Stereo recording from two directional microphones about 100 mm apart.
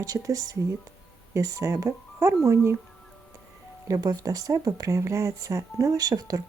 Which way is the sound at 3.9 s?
40° right (ahead or behind).